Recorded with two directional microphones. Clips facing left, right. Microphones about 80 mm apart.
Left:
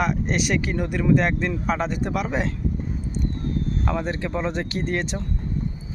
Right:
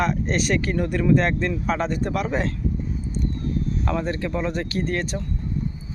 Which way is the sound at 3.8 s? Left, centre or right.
Centre.